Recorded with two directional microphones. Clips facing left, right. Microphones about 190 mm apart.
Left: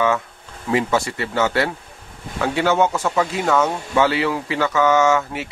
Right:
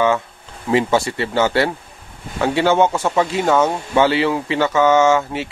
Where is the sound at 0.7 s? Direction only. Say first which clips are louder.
Right 3 dB; 25° right (ahead or behind).